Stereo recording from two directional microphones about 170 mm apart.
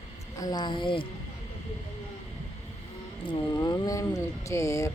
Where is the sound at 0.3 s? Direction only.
25° left (ahead or behind).